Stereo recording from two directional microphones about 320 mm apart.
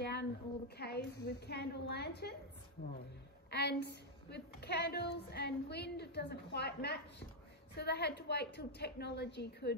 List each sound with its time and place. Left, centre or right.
0.0 s a sound: left
0.7 s a woman's voice: left
3.4 s a woman's voice: left